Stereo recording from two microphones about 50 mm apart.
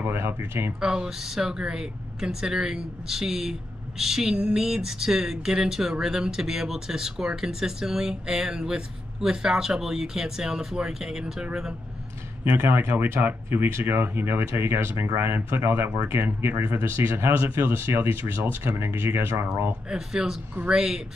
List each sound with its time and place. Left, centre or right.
0.0 s speech: right
0.7 s speech: centre
12.6 s speech: right
19.9 s speech: centre